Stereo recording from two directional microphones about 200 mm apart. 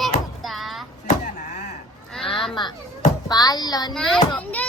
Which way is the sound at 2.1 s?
Centre (ahead or behind).